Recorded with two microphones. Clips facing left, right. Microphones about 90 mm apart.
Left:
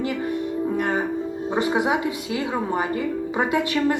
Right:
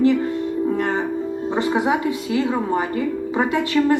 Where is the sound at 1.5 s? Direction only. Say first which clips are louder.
Right 2 dB; 20° left (ahead or behind).